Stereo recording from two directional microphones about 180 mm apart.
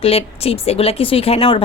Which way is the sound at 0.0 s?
35° left (ahead or behind).